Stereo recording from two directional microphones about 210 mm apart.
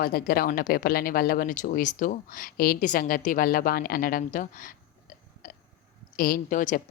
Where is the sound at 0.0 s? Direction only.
45° left (ahead or behind).